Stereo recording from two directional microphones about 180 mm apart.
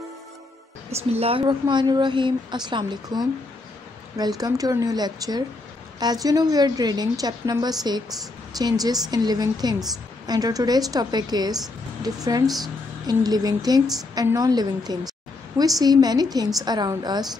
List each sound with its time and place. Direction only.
1.1 s a woman's voice: 30° right (ahead or behind)
4.4 s a woman's voice: 20° right (ahead or behind)
12.4 s a woman's voice: centre (ahead or behind)
13.0 s a woman's voice: 20° right (ahead or behind)